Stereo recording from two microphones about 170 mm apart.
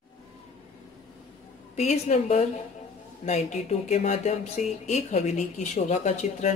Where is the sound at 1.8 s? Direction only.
40° left (ahead or behind).